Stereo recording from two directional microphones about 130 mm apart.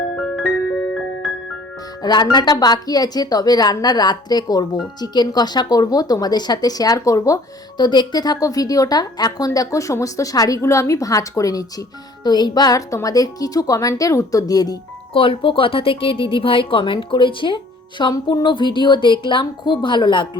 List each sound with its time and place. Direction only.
2.0 s a woman's voice: 35° left (ahead or behind)
15.1 s speech: 45° left (ahead or behind)